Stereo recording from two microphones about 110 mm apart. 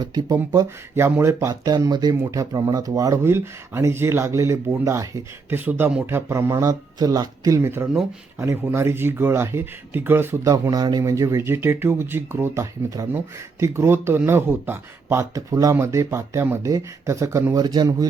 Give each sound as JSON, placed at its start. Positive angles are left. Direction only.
{"t": 0.0, "sound": "speech", "side_deg": -35}
{"t": 2.1, "sound": "speech", "side_deg": -25}